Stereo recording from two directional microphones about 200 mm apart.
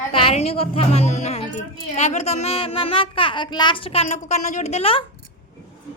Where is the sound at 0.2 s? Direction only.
30° left (ahead or behind).